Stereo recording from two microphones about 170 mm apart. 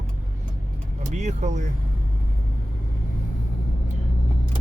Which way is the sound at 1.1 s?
45° right (ahead or behind).